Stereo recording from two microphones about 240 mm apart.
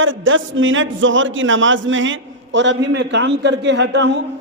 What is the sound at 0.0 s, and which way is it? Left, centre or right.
A man's voice, right.